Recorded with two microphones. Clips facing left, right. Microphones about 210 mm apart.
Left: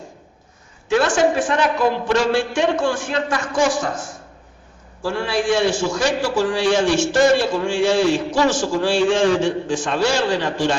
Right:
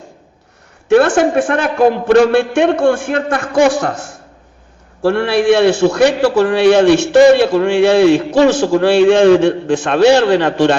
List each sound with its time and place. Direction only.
0.9 s a man's voice: 60° right (ahead or behind)